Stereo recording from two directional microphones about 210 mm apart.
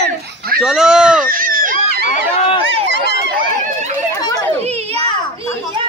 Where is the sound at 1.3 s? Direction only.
40° right (ahead or behind).